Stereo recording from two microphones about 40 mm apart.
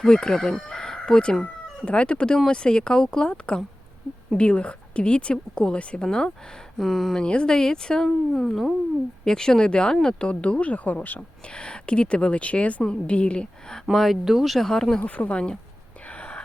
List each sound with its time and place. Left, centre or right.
0.0 s speech: centre
0.7 s chicken: centre
1.8 s a woman's voice: left
4.4 s a woman's voice: left
6.1 s speech: centre
7.2 s speech: left
10.2 s speech: left
11.2 s a woman's voice: left
13.9 s speech: centre
15.0 s speech: left
16.0 s whispering: left